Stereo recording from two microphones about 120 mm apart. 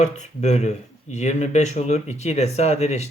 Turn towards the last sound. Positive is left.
turn(degrees=70)  # may be behind; listen again after turning